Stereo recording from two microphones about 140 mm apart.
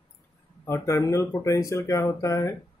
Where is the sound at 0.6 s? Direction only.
20° left (ahead or behind).